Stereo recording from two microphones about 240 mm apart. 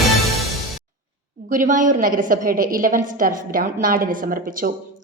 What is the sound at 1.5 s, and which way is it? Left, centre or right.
A woman's voice, right.